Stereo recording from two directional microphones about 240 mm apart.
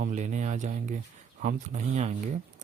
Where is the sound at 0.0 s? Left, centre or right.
Right.